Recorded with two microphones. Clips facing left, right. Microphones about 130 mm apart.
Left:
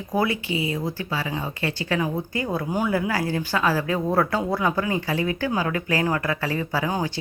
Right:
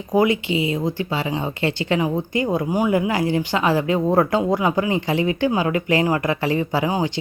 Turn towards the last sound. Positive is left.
turn(degrees=-15)  # may be behind; listen again after turning